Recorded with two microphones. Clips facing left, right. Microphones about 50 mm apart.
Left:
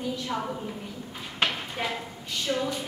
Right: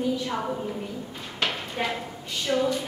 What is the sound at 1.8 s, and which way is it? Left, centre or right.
Speech, centre.